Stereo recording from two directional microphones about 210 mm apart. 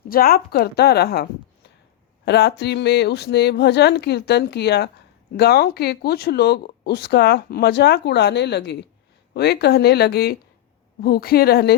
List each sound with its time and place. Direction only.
0.1 s speech: 45° left (ahead or behind)